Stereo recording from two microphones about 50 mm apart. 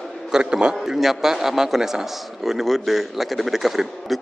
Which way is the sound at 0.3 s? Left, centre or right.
Centre.